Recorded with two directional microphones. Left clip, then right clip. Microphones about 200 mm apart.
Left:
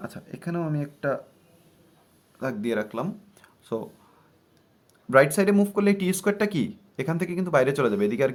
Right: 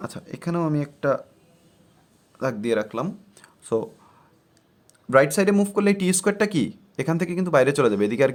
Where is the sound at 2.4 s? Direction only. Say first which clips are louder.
Right 4 dB; 35° right (ahead or behind).